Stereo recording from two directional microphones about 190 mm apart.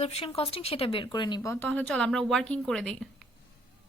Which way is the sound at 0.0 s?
35° left (ahead or behind).